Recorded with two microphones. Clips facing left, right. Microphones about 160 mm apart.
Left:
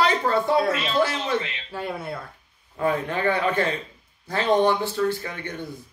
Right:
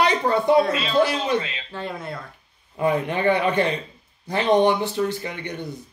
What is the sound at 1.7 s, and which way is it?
Speech, 10° left (ahead or behind).